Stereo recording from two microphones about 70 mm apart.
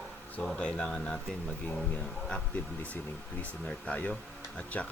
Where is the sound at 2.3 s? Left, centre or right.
Centre.